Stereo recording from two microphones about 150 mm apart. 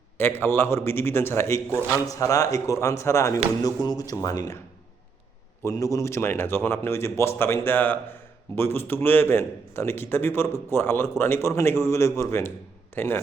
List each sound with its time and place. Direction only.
0.2 s a man's voice: 15° left (ahead or behind)
5.6 s a man's voice: 20° left (ahead or behind)